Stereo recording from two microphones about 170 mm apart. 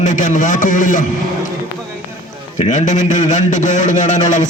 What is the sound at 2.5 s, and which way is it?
A man's voice, 45° left (ahead or behind).